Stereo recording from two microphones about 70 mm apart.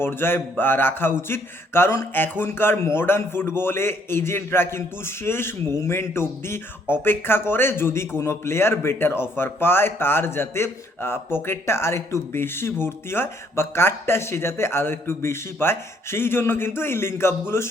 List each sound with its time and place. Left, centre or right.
0.0 s speech: left
2.1 s speech: left